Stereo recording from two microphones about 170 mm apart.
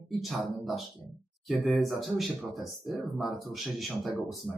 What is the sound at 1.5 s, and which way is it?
Speech, centre (ahead or behind).